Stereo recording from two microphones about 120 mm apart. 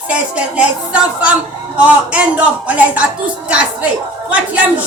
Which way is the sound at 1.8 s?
10° right (ahead or behind).